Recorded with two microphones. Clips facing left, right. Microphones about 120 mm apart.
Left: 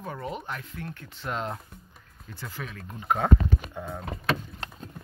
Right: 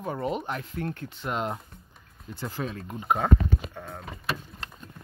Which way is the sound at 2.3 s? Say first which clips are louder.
Right 6 dB; 25° right (ahead or behind).